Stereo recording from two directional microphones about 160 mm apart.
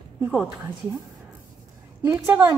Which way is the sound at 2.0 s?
15° right (ahead or behind).